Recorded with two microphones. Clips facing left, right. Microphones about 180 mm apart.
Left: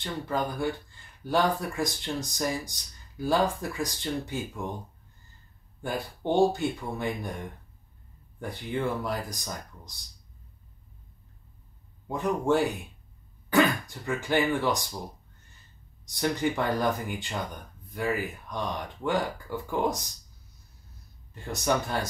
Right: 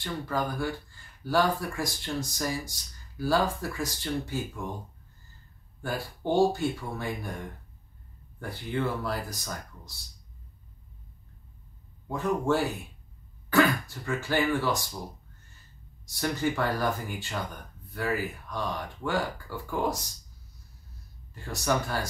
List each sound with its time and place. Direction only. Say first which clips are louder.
0.0 s speech: left 1 dB; 20° left (ahead or behind)
5.8 s speech: left 1 dB; 20° left (ahead or behind)
8.4 s speech: even; 20° left (ahead or behind)
12.1 s speech: left 1 dB; 20° left (ahead or behind)
16.1 s speech: left 1 dB; 20° left (ahead or behind)
21.5 s speech: left 1 dB; 20° left (ahead or behind)